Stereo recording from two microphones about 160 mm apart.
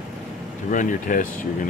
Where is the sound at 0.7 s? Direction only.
55° left (ahead or behind).